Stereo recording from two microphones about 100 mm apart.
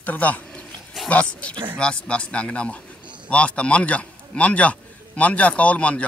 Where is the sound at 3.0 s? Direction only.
50° right (ahead or behind).